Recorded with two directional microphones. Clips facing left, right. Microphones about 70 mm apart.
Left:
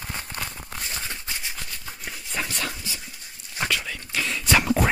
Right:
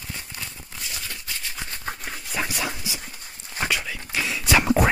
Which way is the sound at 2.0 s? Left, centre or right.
Centre.